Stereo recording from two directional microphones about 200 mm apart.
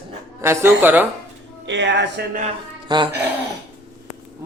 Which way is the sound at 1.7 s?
60° right (ahead or behind).